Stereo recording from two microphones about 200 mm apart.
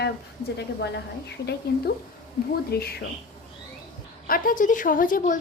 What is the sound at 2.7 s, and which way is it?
Speech, 55° left (ahead or behind).